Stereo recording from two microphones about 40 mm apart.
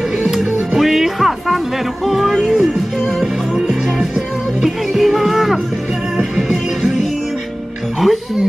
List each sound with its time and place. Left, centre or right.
0.7 s music: centre
2.0 s a sound: centre
2.4 s music: centre